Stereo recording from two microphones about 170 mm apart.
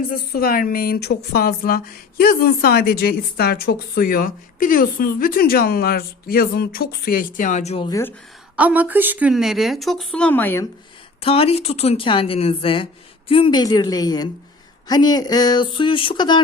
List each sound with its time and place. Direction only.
0.1 s speech: 60° left (ahead or behind); by 7.9 s 40° left (ahead or behind)
7.9 s speech: 20° left (ahead or behind)
8.5 s a woman's voice: 10° right (ahead or behind); by 10.7 s 15° left (ahead or behind)
11.2 s speech: 35° left (ahead or behind)